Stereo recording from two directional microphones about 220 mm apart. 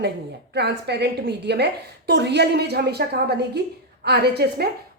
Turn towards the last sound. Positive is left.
turn(degrees=-50)  # may be behind; listen again after turning